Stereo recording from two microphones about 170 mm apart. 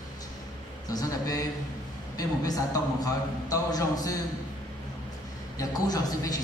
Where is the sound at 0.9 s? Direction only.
20° left (ahead or behind).